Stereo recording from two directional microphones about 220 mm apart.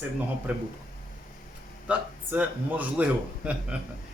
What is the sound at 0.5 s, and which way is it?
Speech, 5° right (ahead or behind).